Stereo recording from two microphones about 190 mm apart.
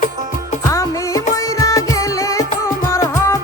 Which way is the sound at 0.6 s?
15° left (ahead or behind).